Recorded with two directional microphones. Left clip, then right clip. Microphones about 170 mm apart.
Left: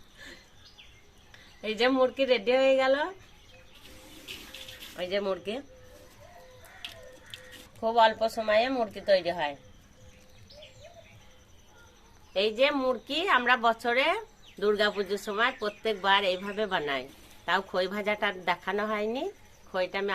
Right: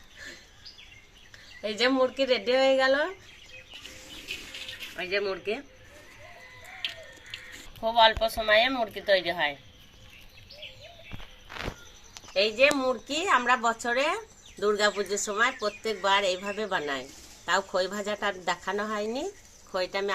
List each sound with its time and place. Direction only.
1.6 s speech: centre (ahead or behind)
7.9 s a woman's voice: 30° left (ahead or behind)
12.3 s a woman's voice: 30° left (ahead or behind)
12.7 s speech: 5° left (ahead or behind)